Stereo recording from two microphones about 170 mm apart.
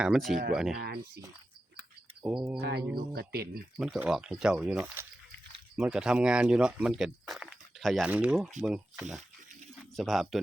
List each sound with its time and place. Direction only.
0.0 s speech: centre (ahead or behind)
2.2 s speech: 10° right (ahead or behind)
2.6 s speech: 70° right (ahead or behind)
3.8 s speech: 5° right (ahead or behind)